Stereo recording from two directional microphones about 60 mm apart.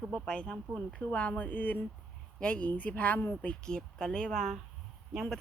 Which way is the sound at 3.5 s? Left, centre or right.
Centre.